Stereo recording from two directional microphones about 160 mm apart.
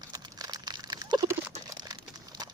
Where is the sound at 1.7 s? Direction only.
25° right (ahead or behind).